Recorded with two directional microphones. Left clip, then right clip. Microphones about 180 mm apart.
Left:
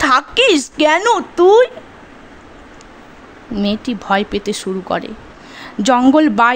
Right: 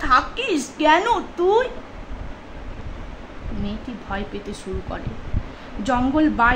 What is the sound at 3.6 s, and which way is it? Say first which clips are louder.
Speech: left 14 dB; 60° left (ahead or behind).